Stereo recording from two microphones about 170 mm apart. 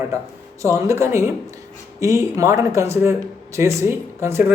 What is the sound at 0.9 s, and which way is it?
Speech, 15° right (ahead or behind).